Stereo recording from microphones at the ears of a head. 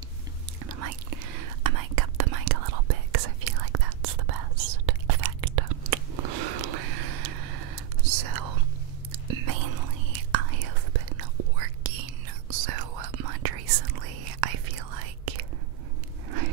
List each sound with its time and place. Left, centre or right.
0.7 s whispering: right